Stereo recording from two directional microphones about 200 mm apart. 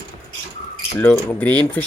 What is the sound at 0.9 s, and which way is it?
Speech, 10° left (ahead or behind).